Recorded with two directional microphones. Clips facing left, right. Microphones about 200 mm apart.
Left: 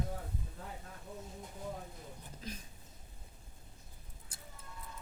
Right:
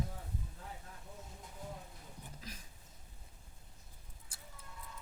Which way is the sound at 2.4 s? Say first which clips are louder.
Left 8 dB; 25° left (ahead or behind).